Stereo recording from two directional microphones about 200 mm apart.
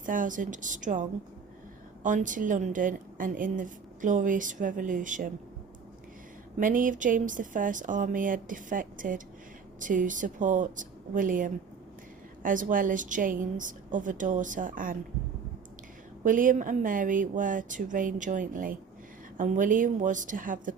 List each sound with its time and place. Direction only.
0.0 s a woman's voice: 40° right (ahead or behind)
2.0 s a woman's voice: 40° right (ahead or behind)
6.6 s a woman's voice: 40° right (ahead or behind)
16.2 s a woman's voice: 40° right (ahead or behind)